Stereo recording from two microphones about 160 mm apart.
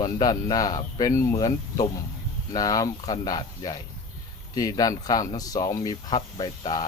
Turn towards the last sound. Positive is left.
turn(degrees=25)  # may be behind; listen again after turning